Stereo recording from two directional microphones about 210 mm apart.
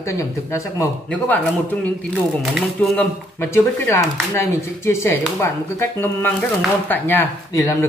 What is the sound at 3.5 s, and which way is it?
Speech, 15° left (ahead or behind).